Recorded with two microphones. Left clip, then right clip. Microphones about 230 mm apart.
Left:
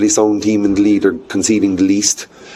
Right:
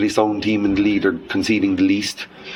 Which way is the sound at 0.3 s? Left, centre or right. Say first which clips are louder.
Left 5 dB; left.